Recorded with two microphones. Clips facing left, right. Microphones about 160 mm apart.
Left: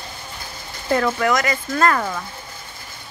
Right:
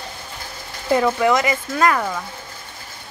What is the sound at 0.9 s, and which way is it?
Speech, 15° right (ahead or behind).